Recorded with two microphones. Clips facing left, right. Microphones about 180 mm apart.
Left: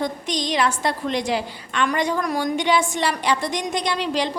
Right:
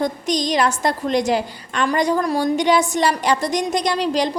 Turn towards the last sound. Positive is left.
turn(degrees=-40)  # may be behind; listen again after turning